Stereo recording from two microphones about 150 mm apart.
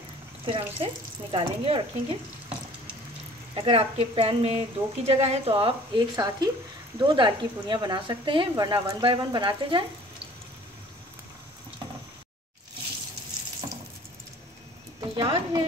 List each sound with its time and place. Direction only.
0.5 s a woman's voice: 35° right (ahead or behind)
3.5 s a woman's voice: 40° right (ahead or behind)
15.0 s speech: 30° right (ahead or behind)